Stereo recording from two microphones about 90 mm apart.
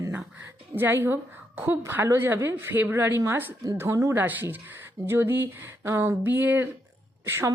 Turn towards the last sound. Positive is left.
turn(degrees=-30)  # may be behind; listen again after turning